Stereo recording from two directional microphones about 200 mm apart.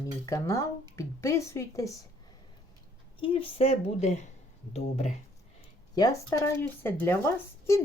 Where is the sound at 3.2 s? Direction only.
25° left (ahead or behind).